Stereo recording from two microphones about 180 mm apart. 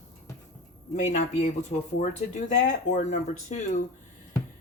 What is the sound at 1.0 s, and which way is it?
Speech, 40° left (ahead or behind).